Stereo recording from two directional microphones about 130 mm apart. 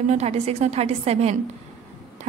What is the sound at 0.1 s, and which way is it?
A woman's voice, 55° right (ahead or behind).